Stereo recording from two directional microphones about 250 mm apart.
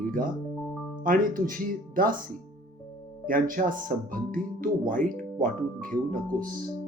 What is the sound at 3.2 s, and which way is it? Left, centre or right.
Speech, right.